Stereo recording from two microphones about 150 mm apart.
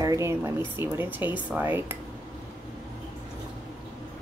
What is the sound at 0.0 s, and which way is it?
Speech, 20° right (ahead or behind).